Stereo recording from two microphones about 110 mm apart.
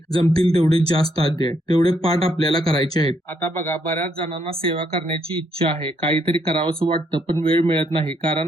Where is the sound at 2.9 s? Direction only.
35° left (ahead or behind).